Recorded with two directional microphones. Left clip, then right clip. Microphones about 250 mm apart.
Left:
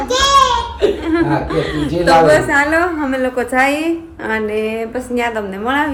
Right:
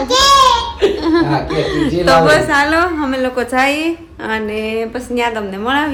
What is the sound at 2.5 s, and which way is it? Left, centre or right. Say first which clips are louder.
A woman's voice: right 1 dB; centre.